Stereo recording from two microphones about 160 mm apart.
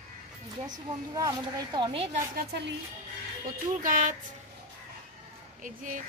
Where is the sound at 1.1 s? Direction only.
25° right (ahead or behind).